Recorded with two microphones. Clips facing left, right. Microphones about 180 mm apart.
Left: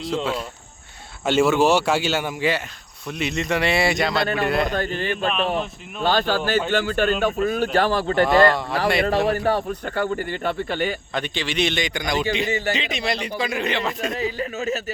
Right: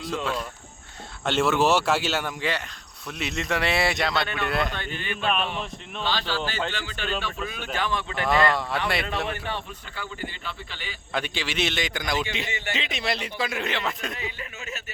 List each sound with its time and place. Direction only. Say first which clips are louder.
0.0 s cricket: left 5 dB; 20° left (ahead or behind)
1.2 s speech: left 5 dB; centre (ahead or behind)
4.7 s speech: left 9 dB; 40° left (ahead or behind)
11.1 s speech: left 3 dB; 5° right (ahead or behind)
12.5 s speech: left 10 dB; 40° left (ahead or behind)
12.7 s speech: left 4 dB; centre (ahead or behind)
14.2 s speech: left 11 dB; 35° left (ahead or behind)